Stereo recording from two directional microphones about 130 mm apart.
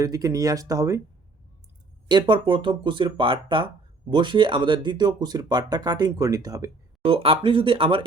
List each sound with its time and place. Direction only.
0.0 s speech: 25° right (ahead or behind)
2.0 s speech: 35° right (ahead or behind)
7.0 s speech: 45° right (ahead or behind)